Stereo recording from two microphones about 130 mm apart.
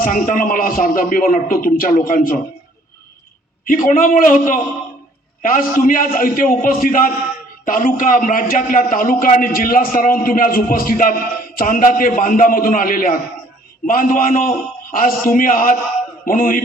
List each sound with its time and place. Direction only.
0.0 s a man's voice: 90° left
3.8 s a man's voice: 90° left